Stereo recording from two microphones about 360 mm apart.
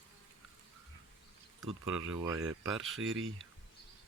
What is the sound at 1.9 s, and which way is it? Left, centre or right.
Speech, right.